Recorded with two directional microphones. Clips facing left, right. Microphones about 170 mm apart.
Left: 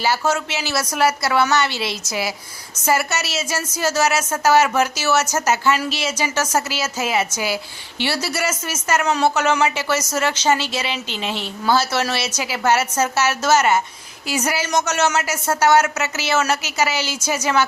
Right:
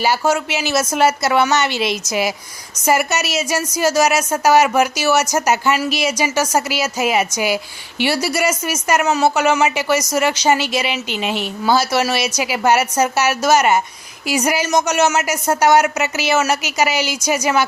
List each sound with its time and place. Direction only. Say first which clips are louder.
0.3 s a woman's voice: right 4 dB; 15° right (ahead or behind)